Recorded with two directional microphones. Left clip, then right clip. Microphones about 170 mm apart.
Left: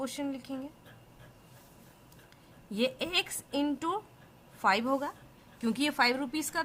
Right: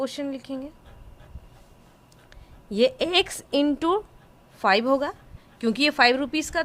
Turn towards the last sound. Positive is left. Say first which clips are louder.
# right 9 dB
turn(degrees=-30)  # may be behind; listen again after turning